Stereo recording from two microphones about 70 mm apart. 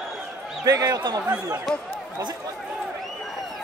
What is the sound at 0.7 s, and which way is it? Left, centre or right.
Speech, right.